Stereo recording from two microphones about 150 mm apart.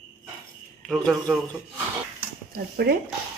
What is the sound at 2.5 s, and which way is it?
Speech, 90° right.